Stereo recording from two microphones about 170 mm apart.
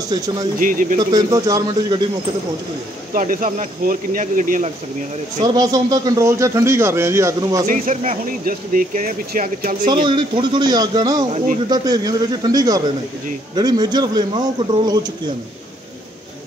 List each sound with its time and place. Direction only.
0.6 s speech: 55° right (ahead or behind)
1.1 s a man's voice: 20° right (ahead or behind)
3.1 s speech: 55° right (ahead or behind)
5.5 s speech: 20° right (ahead or behind)
7.6 s speech: 50° right (ahead or behind)
10.0 s a man's voice: 30° right (ahead or behind)